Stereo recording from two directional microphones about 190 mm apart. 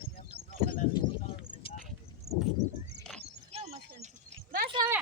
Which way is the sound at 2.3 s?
20° right (ahead or behind).